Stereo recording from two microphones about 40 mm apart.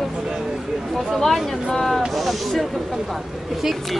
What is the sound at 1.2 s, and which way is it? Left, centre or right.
Speech, centre.